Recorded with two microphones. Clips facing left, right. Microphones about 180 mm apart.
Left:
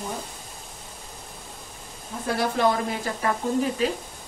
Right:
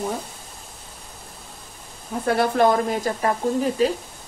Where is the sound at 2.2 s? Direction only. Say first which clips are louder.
Right 4 dB; 55° right (ahead or behind); by 3.9 s 40° right (ahead or behind).